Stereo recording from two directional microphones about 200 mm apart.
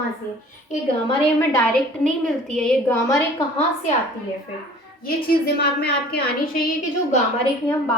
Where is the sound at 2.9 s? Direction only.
15° left (ahead or behind).